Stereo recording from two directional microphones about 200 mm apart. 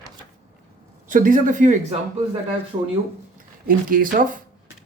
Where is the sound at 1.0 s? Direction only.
40° right (ahead or behind).